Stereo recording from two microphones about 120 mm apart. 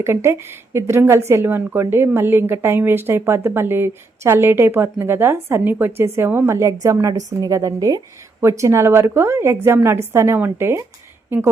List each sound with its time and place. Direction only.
0.0 s speech: 20° right (ahead or behind)